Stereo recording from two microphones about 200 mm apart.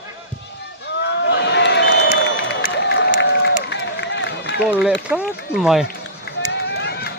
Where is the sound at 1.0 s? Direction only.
60° left (ahead or behind).